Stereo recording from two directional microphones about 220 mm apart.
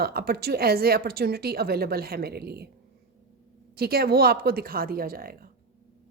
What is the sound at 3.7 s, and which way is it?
A woman's voice, 45° right (ahead or behind).